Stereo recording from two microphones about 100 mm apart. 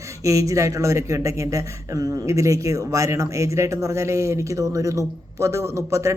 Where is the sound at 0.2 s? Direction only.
35° right (ahead or behind).